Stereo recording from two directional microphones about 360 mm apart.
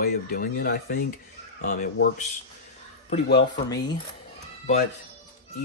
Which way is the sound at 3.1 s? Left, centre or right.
Left.